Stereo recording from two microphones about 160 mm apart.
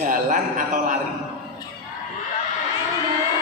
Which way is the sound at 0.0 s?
55° right (ahead or behind).